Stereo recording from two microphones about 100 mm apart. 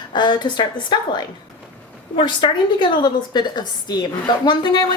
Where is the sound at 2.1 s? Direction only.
55° left (ahead or behind).